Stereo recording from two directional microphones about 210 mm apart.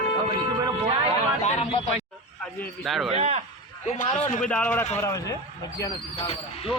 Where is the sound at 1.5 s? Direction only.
30° left (ahead or behind).